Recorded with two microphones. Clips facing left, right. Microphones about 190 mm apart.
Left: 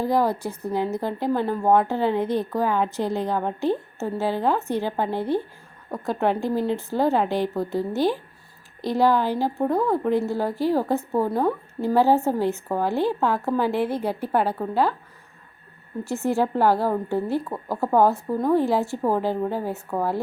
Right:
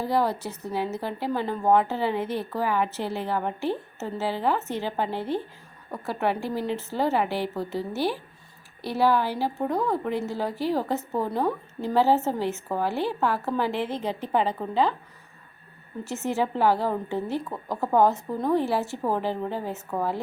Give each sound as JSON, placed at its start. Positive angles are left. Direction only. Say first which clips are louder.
{"t": 0.0, "sound": "a woman's voice", "louder": "left 3 dB", "side_deg": 10}
{"t": 16.0, "sound": "a woman's voice", "louder": "left 4 dB", "side_deg": 15}